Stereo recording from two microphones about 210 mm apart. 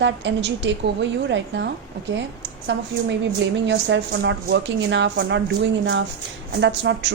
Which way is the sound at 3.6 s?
55° right (ahead or behind).